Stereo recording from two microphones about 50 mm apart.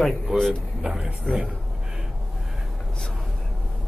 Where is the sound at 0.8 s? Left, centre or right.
Right.